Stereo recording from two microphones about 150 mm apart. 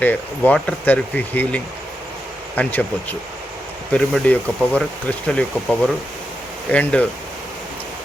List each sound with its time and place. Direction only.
0.0 s speech: 10° left (ahead or behind)